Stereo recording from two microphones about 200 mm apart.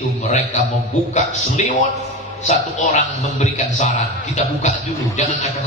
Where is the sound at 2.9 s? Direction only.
35° left (ahead or behind).